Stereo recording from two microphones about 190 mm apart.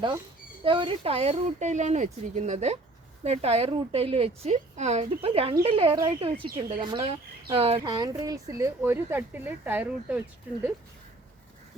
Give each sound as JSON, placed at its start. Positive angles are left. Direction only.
{"t": 0.6, "sound": "a woman's voice", "side_deg": -25}
{"t": 7.8, "sound": "speech", "side_deg": -20}